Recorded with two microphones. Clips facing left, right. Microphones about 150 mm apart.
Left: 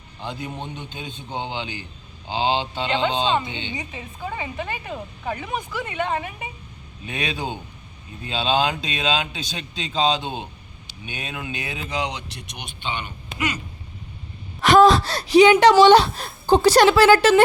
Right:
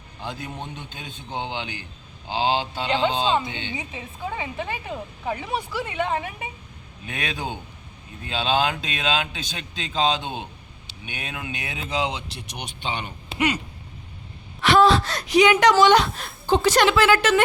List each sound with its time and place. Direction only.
0.9 s speech: 5° right (ahead or behind)
5.5 s speech: 30° right (ahead or behind)
5.9 s speech: 10° right (ahead or behind)
7.0 s a man's voice: 5° left (ahead or behind)
11.9 s speech: 25° right (ahead or behind)
14.6 s a woman's voice: 40° left (ahead or behind)